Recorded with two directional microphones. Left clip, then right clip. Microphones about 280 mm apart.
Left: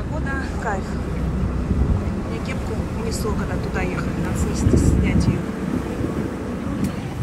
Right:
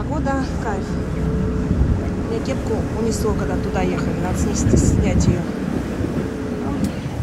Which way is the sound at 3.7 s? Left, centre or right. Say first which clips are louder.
Right 3 dB; centre.